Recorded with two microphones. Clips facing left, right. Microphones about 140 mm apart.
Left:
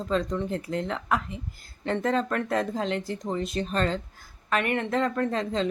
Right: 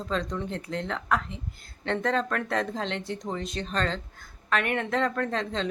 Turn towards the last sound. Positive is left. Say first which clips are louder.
# left 3 dB
turn(degrees=5)  # may be behind; listen again after turning